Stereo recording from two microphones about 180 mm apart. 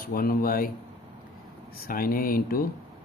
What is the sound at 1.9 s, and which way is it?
Speech, 50° left (ahead or behind).